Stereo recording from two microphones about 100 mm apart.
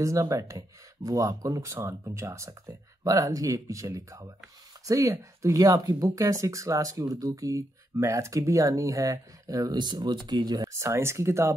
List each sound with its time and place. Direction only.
0.0 s speech: 30° right (ahead or behind)